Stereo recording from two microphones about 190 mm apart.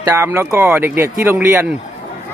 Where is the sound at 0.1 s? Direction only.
10° right (ahead or behind).